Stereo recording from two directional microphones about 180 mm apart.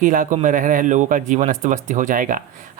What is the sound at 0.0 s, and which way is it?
Speech, 45° right (ahead or behind).